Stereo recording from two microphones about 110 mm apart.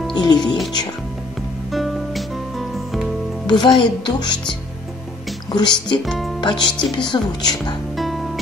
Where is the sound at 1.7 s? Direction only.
Centre (ahead or behind).